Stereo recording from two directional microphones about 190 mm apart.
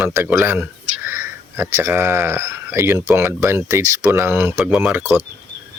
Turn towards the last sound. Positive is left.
turn(degrees=-10)  # may be behind; listen again after turning